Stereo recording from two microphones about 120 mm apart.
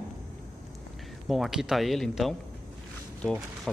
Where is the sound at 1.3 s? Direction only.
5° right (ahead or behind).